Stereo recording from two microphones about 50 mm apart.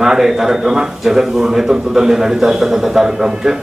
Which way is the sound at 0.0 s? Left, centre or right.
Centre.